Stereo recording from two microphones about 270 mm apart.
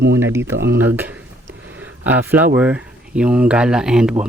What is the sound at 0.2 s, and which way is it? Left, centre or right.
Speech, centre.